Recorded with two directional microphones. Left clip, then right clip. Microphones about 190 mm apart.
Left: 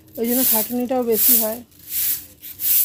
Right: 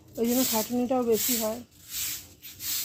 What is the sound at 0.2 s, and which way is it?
Speech, 20° left (ahead or behind).